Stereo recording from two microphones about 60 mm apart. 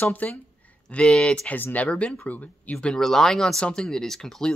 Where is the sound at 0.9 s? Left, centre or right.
Centre.